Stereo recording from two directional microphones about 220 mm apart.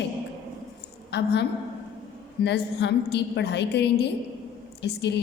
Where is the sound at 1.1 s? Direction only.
50° left (ahead or behind).